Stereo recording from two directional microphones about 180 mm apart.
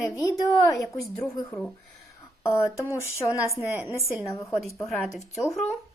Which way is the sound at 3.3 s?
10° right (ahead or behind).